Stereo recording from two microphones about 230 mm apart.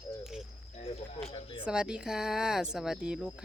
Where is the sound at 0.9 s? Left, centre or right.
Left.